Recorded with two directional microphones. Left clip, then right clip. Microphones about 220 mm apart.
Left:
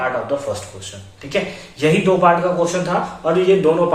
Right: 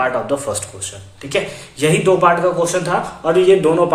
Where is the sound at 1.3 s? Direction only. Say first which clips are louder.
Right 2 dB; 45° right (ahead or behind).